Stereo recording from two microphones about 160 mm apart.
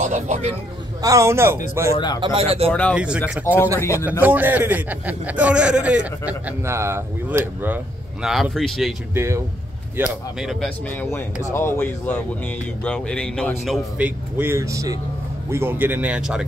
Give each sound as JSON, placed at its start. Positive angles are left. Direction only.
{"t": 0.0, "sound": "speech", "side_deg": -45}
{"t": 1.0, "sound": "a man's voice", "side_deg": -20}
{"t": 1.9, "sound": "a man's voice", "side_deg": 25}
{"t": 2.1, "sound": "a man's voice", "side_deg": -35}
{"t": 2.9, "sound": "a man's voice", "side_deg": -5}
{"t": 3.4, "sound": "speech", "side_deg": 15}
{"t": 4.2, "sound": "a man's voice", "side_deg": -10}
{"t": 9.1, "sound": "a man's voice", "side_deg": -15}
{"t": 9.9, "sound": "speech", "side_deg": -5}
{"t": 11.0, "sound": "speech", "side_deg": 15}
{"t": 13.9, "sound": "a man's voice", "side_deg": -10}